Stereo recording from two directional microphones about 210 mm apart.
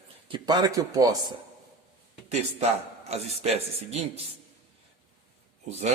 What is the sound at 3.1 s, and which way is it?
Speech, 30° right (ahead or behind).